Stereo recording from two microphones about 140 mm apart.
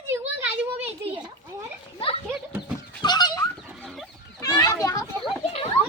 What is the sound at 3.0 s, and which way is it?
Fowl, 30° left (ahead or behind).